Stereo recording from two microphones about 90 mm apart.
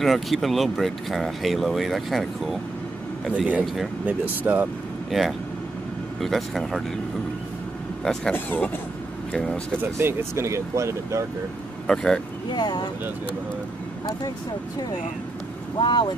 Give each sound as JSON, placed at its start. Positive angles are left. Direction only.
{"t": 0.0, "sound": "speech", "side_deg": 0}
{"t": 3.3, "sound": "speech", "side_deg": -15}
{"t": 3.6, "sound": "speech", "side_deg": 0}
{"t": 4.0, "sound": "speech", "side_deg": -20}
{"t": 5.1, "sound": "speech", "side_deg": 0}
{"t": 8.0, "sound": "speech", "side_deg": 5}
{"t": 8.3, "sound": "speech", "side_deg": 20}
{"t": 9.3, "sound": "speech", "side_deg": 5}
{"t": 9.8, "sound": "speech", "side_deg": -25}
{"t": 11.9, "sound": "speech", "side_deg": 5}
{"t": 12.4, "sound": "speech", "side_deg": 50}
{"t": 15.8, "sound": "speech", "side_deg": 60}